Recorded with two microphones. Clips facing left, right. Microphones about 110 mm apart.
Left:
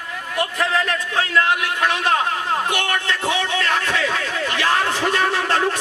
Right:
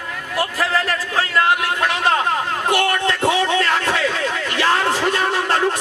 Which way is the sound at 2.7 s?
35° right (ahead or behind).